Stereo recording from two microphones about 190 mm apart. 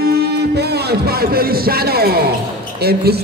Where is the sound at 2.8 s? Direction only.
55° right (ahead or behind).